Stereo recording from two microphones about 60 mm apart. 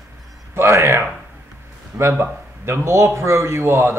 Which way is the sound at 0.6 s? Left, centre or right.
Right.